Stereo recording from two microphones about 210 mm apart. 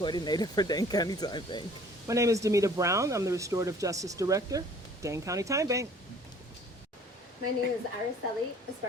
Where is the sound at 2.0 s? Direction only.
15° right (ahead or behind).